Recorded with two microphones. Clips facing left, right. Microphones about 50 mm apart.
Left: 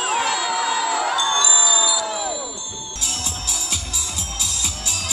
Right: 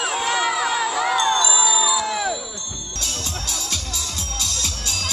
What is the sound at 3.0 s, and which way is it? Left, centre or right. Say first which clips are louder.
Music: even; centre.